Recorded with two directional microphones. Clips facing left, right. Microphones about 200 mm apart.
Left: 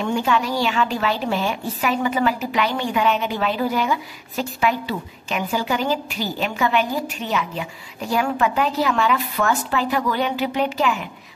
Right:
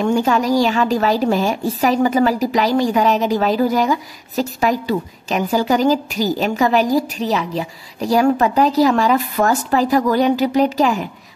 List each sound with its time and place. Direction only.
0.0 s a woman's voice: 40° right (ahead or behind)